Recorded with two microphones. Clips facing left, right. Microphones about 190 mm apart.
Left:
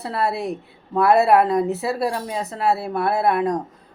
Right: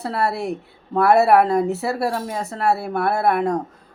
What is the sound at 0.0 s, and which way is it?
Speech, centre (ahead or behind).